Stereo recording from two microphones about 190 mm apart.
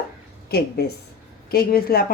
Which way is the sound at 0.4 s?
55° left (ahead or behind).